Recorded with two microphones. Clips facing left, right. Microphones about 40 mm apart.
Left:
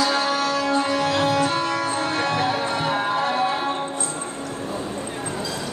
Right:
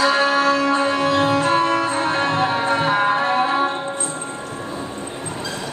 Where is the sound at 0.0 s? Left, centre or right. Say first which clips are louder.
Right 5 dB; right.